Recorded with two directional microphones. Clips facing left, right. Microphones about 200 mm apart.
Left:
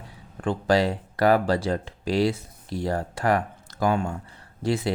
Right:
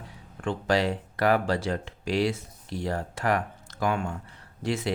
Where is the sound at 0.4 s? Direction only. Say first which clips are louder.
Left 3 dB; 35° left (ahead or behind).